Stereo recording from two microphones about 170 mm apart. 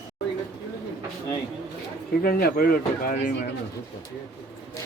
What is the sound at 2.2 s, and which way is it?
Speech, 60° left (ahead or behind).